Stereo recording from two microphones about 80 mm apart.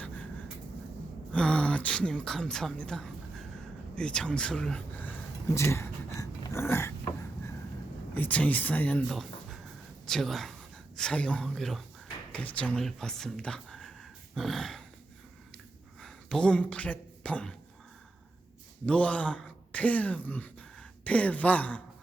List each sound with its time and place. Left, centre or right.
1.3 s a woman's voice: centre
5.5 s a sound: left
8.1 s speech: left
9.0 s a sound: centre
10.1 s a woman's voice: centre
12.3 s a woman's voice: centre
12.8 s speech: centre
15.5 s a sound: centre
18.9 s speech: centre